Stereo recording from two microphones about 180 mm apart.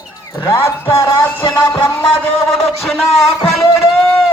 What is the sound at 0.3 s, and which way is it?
Speech, 15° left (ahead or behind).